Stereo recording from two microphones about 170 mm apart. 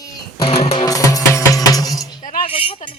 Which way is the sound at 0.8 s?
20° left (ahead or behind).